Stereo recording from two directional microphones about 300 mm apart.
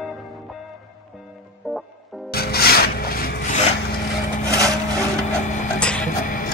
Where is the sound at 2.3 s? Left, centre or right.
Left.